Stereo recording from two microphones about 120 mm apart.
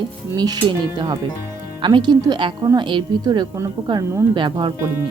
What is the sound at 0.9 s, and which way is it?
Speech, 35° right (ahead or behind).